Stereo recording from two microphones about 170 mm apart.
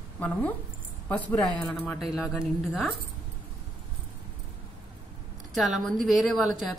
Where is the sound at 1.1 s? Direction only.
10° left (ahead or behind).